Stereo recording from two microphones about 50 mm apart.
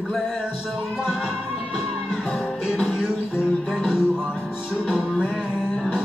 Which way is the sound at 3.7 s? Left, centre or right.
Centre.